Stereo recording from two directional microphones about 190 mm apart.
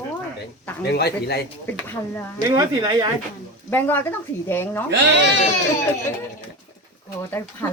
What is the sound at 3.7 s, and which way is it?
A woman's voice, 10° left (ahead or behind).